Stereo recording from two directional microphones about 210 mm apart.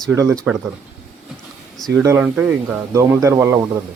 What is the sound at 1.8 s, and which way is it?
Speech, 15° right (ahead or behind).